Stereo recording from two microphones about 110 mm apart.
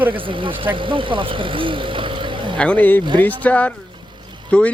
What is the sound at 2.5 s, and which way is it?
A man's voice, 10° left (ahead or behind).